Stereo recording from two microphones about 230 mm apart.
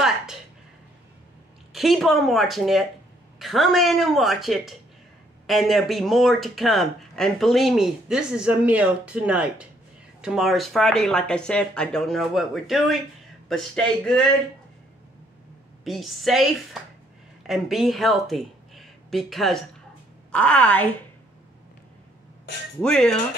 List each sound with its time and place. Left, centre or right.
1.7 s speech: centre
15.8 s speech: centre
22.8 s speech: centre